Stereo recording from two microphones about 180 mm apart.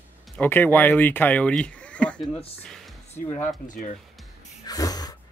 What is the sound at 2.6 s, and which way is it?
Music, centre (ahead or behind).